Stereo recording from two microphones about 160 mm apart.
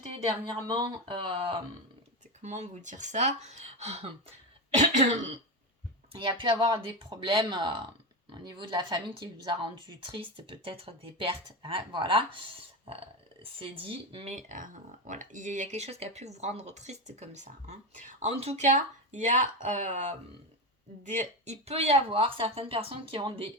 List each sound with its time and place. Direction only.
0.5 s speech: 30° right (ahead or behind)
2.4 s speech: 45° right (ahead or behind)
6.1 s speech: 30° right (ahead or behind)
14.3 s speech: 50° right (ahead or behind); by 23.5 s 30° right (ahead or behind)